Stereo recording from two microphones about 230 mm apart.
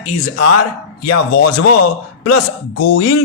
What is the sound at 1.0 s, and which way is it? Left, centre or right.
A man's voice, left.